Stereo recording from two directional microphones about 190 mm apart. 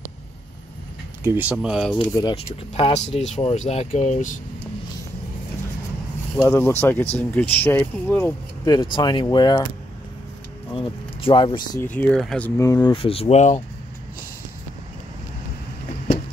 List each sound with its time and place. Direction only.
1.2 s speech: 10° right (ahead or behind)
2.0 s speech: 15° left (ahead or behind)
2.3 s speech: 30° left (ahead or behind)
6.3 s speech: 10° left (ahead or behind)
8.9 s speech: 25° left (ahead or behind)
10.7 s speech: 25° left (ahead or behind)
11.8 s speech: 10° left (ahead or behind); by 13.6 s 35° left (ahead or behind)